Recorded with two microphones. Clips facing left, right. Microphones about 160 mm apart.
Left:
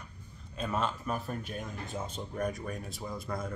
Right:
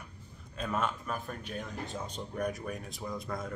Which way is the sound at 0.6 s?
5° left (ahead or behind).